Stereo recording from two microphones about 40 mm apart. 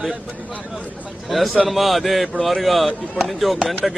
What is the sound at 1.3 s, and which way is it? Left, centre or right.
A man's voice, centre.